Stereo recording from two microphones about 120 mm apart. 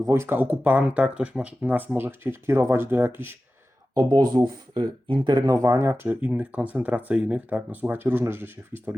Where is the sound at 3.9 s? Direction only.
35° right (ahead or behind); by 8.9 s 20° right (ahead or behind).